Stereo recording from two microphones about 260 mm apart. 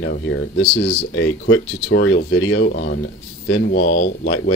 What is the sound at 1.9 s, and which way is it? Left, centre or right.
Speech, left.